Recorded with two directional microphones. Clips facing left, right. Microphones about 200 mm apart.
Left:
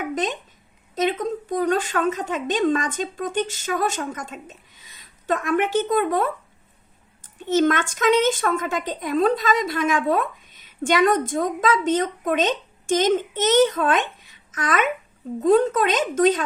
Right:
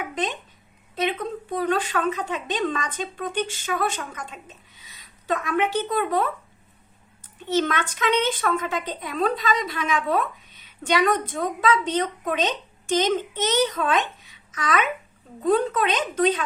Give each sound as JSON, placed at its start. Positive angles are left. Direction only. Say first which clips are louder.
{"t": 0.1, "sound": "a woman's voice", "louder": "left 3 dB", "side_deg": 45}